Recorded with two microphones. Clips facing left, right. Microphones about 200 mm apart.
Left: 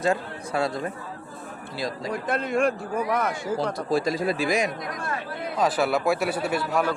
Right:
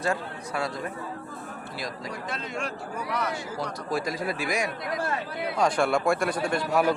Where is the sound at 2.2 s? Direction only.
55° left (ahead or behind).